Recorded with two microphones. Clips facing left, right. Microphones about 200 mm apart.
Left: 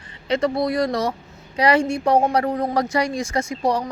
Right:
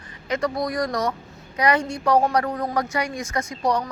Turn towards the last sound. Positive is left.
turn(degrees=25)  # may be behind; listen again after turning